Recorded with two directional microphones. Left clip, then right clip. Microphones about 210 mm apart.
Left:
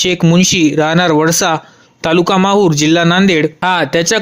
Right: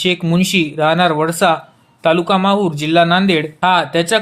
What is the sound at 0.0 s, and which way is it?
Speech, 40° left (ahead or behind).